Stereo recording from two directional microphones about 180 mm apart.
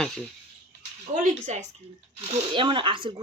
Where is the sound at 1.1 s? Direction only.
45° right (ahead or behind).